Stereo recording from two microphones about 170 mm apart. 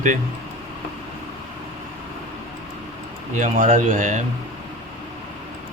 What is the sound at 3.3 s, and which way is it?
Speech, 45° right (ahead or behind).